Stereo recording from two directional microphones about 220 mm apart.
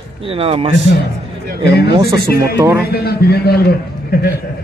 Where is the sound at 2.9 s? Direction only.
45° left (ahead or behind).